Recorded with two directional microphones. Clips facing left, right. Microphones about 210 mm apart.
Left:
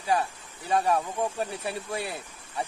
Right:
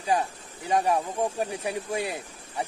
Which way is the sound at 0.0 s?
15° right (ahead or behind).